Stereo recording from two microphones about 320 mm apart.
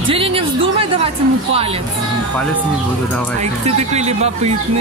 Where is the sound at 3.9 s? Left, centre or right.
Right.